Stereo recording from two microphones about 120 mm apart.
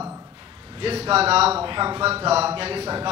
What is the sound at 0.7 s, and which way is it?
A man's voice, 50° right (ahead or behind).